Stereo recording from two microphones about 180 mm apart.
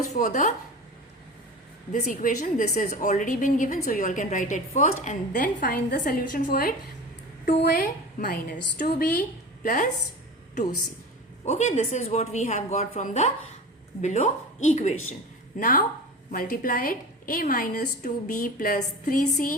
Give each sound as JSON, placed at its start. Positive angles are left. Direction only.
{"t": 0.0, "sound": "speech", "side_deg": 40}
{"t": 1.9, "sound": "a woman's voice", "side_deg": 45}
{"t": 7.8, "sound": "a woman's voice", "side_deg": 50}
{"t": 8.8, "sound": "speech", "side_deg": 60}
{"t": 9.6, "sound": "a woman's voice", "side_deg": 45}
{"t": 11.4, "sound": "a woman's voice", "side_deg": 40}